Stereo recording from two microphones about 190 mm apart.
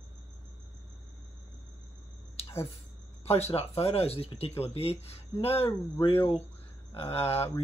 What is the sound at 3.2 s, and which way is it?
Speech, 35° left (ahead or behind).